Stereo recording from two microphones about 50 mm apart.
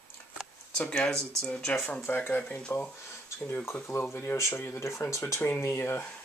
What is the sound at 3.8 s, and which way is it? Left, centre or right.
Speech, left.